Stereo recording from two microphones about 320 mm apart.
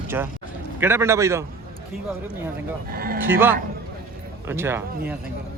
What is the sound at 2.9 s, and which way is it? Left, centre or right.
Speech, right.